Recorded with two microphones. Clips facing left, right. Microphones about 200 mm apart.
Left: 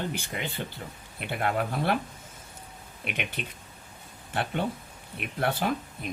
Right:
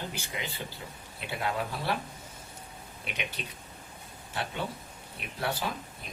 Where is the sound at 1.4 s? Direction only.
55° left (ahead or behind).